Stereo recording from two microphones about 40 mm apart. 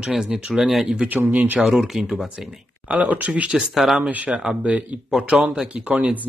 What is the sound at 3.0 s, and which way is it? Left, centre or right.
Speech, right.